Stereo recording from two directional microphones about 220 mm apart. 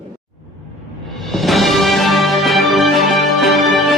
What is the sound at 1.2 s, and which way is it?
Music, centre (ahead or behind).